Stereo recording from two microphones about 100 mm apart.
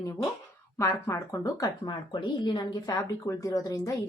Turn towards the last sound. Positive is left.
turn(degrees=35)  # may be behind; listen again after turning